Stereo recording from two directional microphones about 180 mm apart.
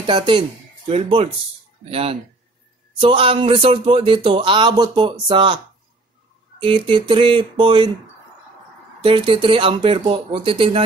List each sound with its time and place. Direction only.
0.0 s speech: 25° right (ahead or behind)
6.6 s speech: 30° right (ahead or behind)
9.0 s speech: 30° right (ahead or behind)